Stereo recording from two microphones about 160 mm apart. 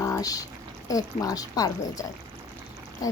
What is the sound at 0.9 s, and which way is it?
Speech, 20° left (ahead or behind).